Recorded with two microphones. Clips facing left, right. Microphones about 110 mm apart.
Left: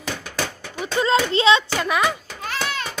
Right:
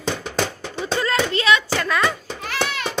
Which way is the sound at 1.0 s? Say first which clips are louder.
Left 4 dB; 25° left (ahead or behind).